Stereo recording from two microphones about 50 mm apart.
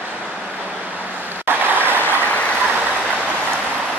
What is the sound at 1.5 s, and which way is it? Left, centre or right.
Applause, right.